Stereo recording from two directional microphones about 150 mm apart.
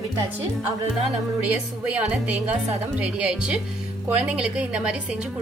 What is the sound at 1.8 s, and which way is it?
A woman's voice, 10° right (ahead or behind).